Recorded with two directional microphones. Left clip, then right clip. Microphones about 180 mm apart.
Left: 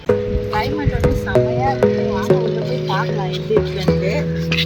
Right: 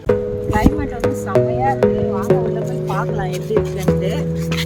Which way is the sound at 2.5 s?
10° right (ahead or behind).